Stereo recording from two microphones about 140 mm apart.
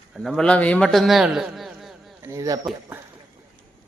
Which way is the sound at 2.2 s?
20° right (ahead or behind).